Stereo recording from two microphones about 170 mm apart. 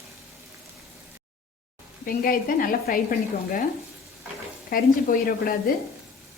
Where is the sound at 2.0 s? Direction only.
55° left (ahead or behind).